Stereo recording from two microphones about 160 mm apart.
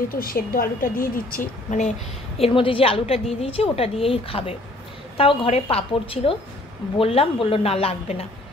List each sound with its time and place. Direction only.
0.1 s speech: 65° left (ahead or behind); by 8.3 s 40° left (ahead or behind)